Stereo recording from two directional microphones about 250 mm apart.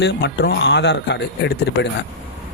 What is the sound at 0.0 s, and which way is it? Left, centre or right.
Speech, left.